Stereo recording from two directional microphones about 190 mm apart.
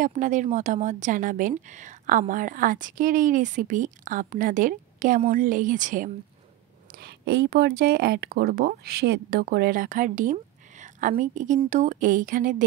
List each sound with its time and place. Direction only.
0.0 s speech: 40° right (ahead or behind)
7.0 s speech: 55° right (ahead or behind)